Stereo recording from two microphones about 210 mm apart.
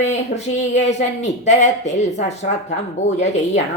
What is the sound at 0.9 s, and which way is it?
Speech, 35° left (ahead or behind).